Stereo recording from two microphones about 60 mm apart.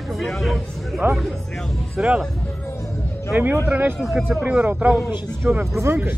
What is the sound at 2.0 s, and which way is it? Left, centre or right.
Speech, centre.